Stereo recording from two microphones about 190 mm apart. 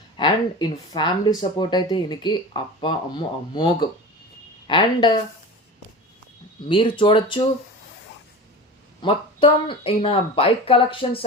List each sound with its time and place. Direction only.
0.2 s speech: 25° left (ahead or behind)
6.7 s speech: 25° left (ahead or behind)
9.0 s speech: 25° left (ahead or behind)